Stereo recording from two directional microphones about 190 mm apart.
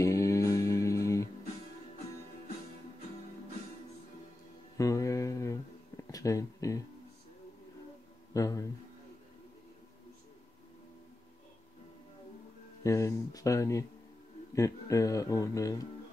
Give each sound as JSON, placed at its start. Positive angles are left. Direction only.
{"t": 0.0, "sound": "music", "side_deg": 15}
{"t": 4.7, "sound": "a sound", "side_deg": 15}
{"t": 8.3, "sound": "speech", "side_deg": 15}
{"t": 12.8, "sound": "speech", "side_deg": 15}